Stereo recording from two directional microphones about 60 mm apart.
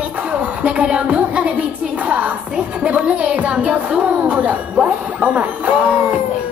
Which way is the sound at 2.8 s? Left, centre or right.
Right.